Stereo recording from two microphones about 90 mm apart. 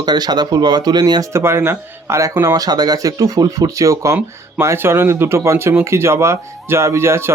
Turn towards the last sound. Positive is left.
turn(degrees=-30)  # may be behind; listen again after turning